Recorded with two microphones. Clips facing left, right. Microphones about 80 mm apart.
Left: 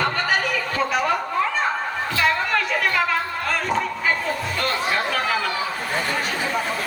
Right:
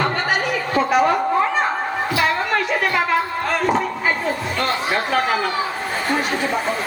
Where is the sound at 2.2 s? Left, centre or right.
Right.